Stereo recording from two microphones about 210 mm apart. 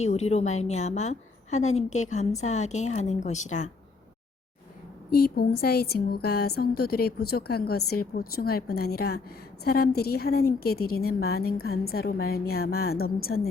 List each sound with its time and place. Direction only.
0.0 s a woman's voice: 30° left (ahead or behind)
5.1 s a woman's voice: 45° left (ahead or behind)